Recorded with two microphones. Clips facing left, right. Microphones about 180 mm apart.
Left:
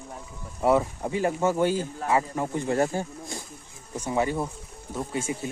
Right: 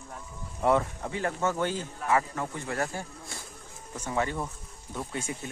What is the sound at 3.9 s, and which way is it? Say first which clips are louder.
Speech: left 4 dB; 10° left (ahead or behind).